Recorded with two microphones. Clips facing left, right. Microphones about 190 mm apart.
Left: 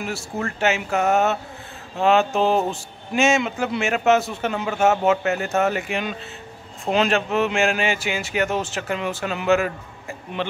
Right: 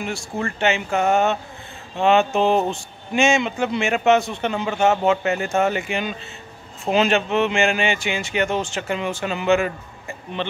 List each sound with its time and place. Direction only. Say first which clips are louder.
0.0 s speech: right 1 dB; 5° left (ahead or behind)